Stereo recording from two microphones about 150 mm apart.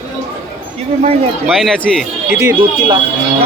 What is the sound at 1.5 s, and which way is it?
Speech, centre (ahead or behind).